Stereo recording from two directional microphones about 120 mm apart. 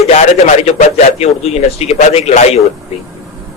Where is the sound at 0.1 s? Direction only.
75° left (ahead or behind).